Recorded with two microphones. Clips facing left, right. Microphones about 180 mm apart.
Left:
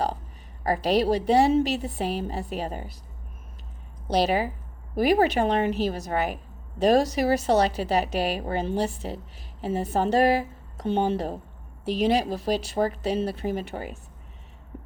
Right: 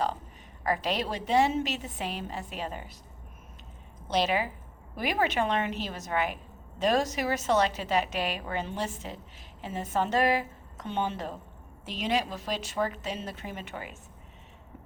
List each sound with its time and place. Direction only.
0.6 s a woman's voice: 35° left (ahead or behind)
4.1 s a woman's voice: 35° left (ahead or behind)